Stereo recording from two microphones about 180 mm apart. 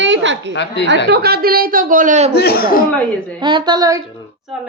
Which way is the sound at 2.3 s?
60° left (ahead or behind).